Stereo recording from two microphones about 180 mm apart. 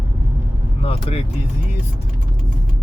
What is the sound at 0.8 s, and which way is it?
Speech, 30° left (ahead or behind).